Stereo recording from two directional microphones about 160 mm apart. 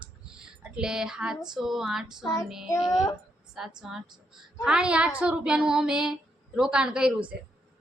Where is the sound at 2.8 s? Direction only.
Centre (ahead or behind).